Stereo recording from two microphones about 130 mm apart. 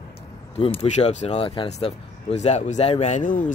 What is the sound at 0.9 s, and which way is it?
Speech, 60° left (ahead or behind).